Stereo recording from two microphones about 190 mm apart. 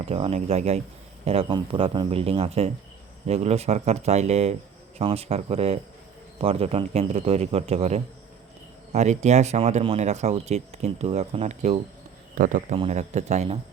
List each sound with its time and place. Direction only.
0.0 s speech: 35° right (ahead or behind)